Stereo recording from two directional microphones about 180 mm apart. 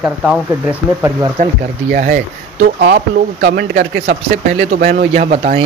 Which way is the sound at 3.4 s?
70° right (ahead or behind).